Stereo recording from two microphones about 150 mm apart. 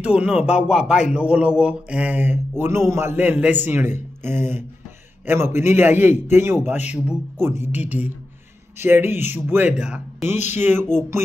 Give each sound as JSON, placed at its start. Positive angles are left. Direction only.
{"t": 0.0, "sound": "speech", "side_deg": -10}
{"t": 8.7, "sound": "speech", "side_deg": -15}